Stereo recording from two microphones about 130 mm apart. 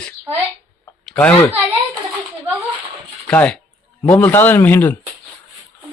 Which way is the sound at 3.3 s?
15° left (ahead or behind).